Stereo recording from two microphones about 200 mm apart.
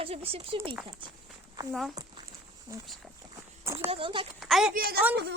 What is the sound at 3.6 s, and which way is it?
Speech, 15° right (ahead or behind).